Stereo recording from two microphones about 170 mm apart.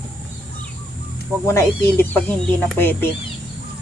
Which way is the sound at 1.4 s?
15° left (ahead or behind).